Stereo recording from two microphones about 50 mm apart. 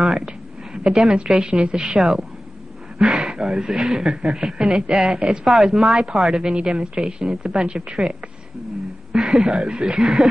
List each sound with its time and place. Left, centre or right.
0.0 s a sound: centre
0.8 s a woman's voice: centre
2.0 s speech: centre
3.0 s speech: centre
6.3 s a woman's voice: centre